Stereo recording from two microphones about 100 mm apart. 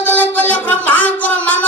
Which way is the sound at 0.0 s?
20° left (ahead or behind).